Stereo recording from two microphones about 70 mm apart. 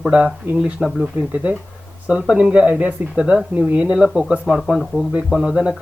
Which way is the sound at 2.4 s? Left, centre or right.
Centre.